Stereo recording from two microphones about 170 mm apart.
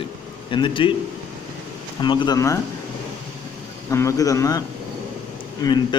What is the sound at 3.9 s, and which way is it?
Speech, 20° left (ahead or behind).